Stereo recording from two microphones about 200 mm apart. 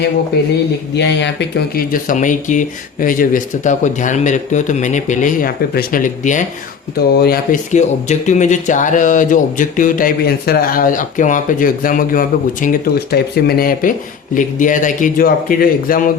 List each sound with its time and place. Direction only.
0.9 s speech: 60° left (ahead or behind); by 6.4 s 40° left (ahead or behind)
7.2 s speech: 50° left (ahead or behind)
7.7 s speech: 35° left (ahead or behind)